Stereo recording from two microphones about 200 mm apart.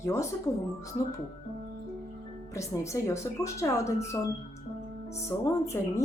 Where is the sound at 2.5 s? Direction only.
15° left (ahead or behind).